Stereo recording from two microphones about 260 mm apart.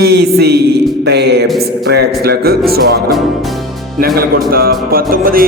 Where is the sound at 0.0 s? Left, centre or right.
Right.